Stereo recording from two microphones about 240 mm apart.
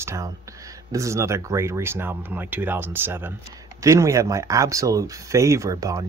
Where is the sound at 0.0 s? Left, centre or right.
Centre.